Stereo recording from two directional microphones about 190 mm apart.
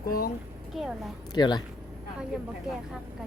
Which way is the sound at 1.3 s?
25° left (ahead or behind).